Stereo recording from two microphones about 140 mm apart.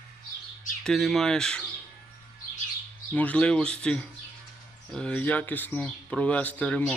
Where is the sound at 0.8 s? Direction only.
Centre (ahead or behind).